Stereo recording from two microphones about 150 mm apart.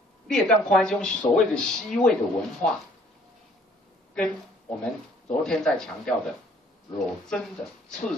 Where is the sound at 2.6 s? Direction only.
55° left (ahead or behind).